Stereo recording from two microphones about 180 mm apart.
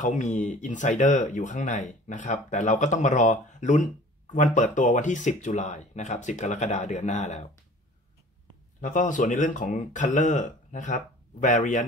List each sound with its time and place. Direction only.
0.0 s speech: 45° left (ahead or behind)
8.8 s speech: 45° left (ahead or behind)